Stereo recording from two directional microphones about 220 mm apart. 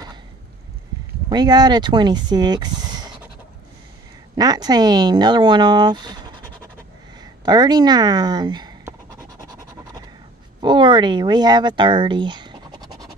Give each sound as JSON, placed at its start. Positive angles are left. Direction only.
{"t": 1.3, "sound": "speech", "side_deg": -20}
{"t": 4.4, "sound": "speech", "side_deg": -20}
{"t": 10.6, "sound": "speech", "side_deg": -20}